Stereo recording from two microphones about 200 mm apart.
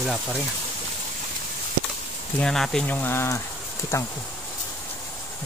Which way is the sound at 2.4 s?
Centre (ahead or behind).